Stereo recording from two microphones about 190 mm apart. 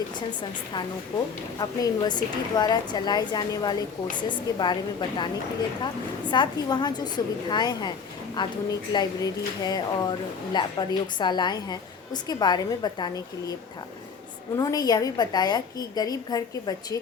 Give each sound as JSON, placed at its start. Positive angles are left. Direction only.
{"t": 1.5, "sound": "speech", "side_deg": 20}
{"t": 14.5, "sound": "speech", "side_deg": 20}